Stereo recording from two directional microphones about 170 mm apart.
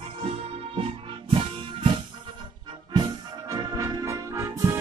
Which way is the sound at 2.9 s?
25° right (ahead or behind).